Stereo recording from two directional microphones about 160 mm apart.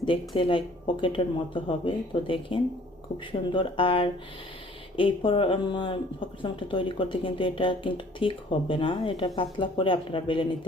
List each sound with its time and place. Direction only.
0.0 s speech: 35° left (ahead or behind)